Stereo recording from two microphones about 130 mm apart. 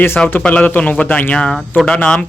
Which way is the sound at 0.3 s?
10° left (ahead or behind).